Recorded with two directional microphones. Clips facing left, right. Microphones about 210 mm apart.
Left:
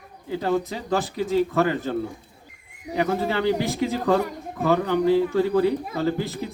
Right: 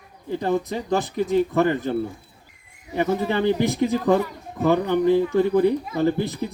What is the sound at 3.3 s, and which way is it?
Speech, 20° right (ahead or behind).